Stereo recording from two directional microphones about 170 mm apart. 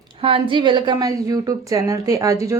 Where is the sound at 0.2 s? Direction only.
35° right (ahead or behind).